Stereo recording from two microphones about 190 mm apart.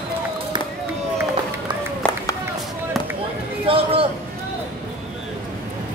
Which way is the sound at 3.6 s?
30° right (ahead or behind).